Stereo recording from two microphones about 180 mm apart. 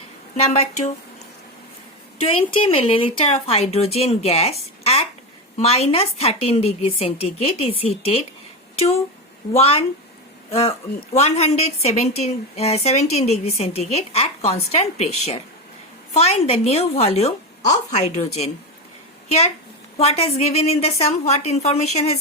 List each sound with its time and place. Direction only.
0.3 s a woman's voice: 35° left (ahead or behind)
2.2 s a woman's voice: 30° left (ahead or behind)
9.6 s a woman's voice: 30° left (ahead or behind)
20.0 s a woman's voice: 35° left (ahead or behind)